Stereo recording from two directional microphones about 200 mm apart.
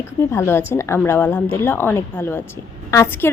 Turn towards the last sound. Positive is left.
turn(degrees=15)  # may be behind; listen again after turning